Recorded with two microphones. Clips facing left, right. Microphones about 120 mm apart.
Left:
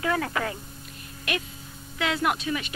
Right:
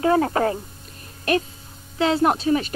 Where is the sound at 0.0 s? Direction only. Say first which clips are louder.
Right 8 dB; 35° right (ahead or behind).